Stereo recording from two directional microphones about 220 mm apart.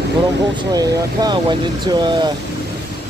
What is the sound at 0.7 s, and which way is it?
Speech, 15° right (ahead or behind).